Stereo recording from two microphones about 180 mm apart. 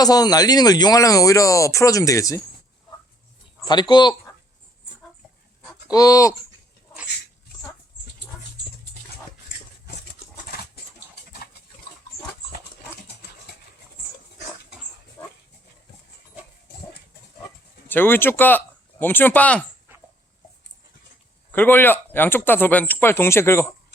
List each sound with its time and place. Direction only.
0.0 s speech: 20° left (ahead or behind)
3.6 s speech: 25° left (ahead or behind)
5.9 s speech: 20° left (ahead or behind)
10.4 s a sound: 60° left (ahead or behind)
12.1 s pig: 60° left (ahead or behind)
17.8 s speech: 10° left (ahead or behind)
19.9 s dog: 10° right (ahead or behind)
21.5 s speech: 10° left (ahead or behind)